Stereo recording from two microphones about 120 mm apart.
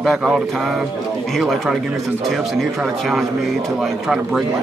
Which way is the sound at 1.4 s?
Centre (ahead or behind).